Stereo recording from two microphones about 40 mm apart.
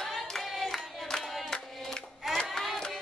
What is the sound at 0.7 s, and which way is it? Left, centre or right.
Singing, centre.